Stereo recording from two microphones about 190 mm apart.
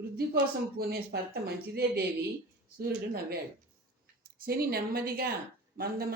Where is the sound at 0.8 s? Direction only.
55° right (ahead or behind).